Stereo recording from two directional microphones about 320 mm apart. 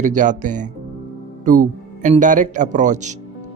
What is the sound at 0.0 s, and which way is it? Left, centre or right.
Speech, right.